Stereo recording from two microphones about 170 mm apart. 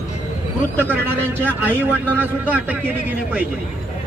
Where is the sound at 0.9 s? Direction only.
10° right (ahead or behind).